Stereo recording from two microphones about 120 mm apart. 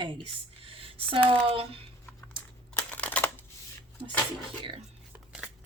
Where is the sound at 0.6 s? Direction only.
50° right (ahead or behind).